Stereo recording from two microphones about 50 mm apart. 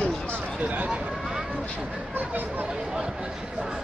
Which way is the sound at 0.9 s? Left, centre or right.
Centre.